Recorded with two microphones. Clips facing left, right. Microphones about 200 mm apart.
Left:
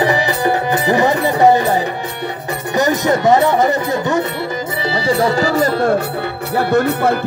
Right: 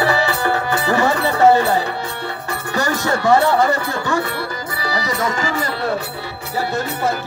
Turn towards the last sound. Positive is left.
turn(degrees=60)  # may be behind; listen again after turning